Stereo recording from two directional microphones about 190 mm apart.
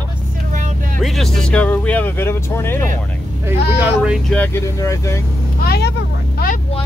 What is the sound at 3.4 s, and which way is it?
Speech, 10° right (ahead or behind).